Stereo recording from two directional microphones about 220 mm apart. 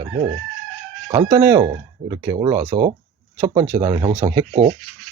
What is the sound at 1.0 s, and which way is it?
Speech, 20° right (ahead or behind).